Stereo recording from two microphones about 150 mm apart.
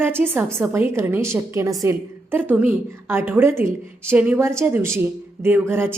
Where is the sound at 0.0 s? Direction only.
15° right (ahead or behind).